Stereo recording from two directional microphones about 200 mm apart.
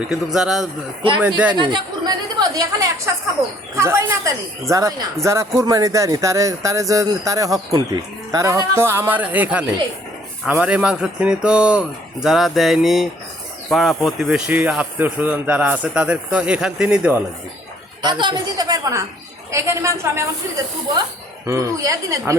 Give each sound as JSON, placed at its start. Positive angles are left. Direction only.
{"t": 0.3, "sound": "speech", "side_deg": 0}
{"t": 1.5, "sound": "a woman's voice", "side_deg": -20}
{"t": 18.0, "sound": "a woman's voice", "side_deg": -20}
{"t": 21.4, "sound": "speech", "side_deg": -15}